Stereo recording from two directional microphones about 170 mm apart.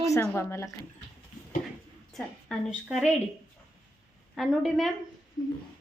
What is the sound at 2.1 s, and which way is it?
Speech, centre (ahead or behind).